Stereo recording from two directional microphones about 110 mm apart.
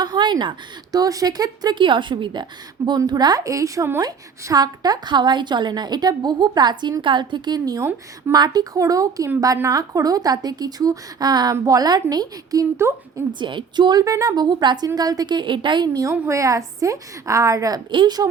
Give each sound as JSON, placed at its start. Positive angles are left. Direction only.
{"t": 0.0, "sound": "speech", "side_deg": -45}
{"t": 0.9, "sound": "a woman's voice", "side_deg": -35}
{"t": 4.0, "sound": "a woman's voice", "side_deg": -35}
{"t": 13.4, "sound": "a woman's voice", "side_deg": -45}
{"t": 16.3, "sound": "a woman's voice", "side_deg": -30}